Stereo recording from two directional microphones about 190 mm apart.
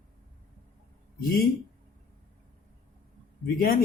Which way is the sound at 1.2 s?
50° left (ahead or behind).